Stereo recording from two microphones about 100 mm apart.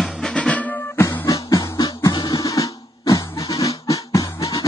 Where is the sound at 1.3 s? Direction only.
40° left (ahead or behind).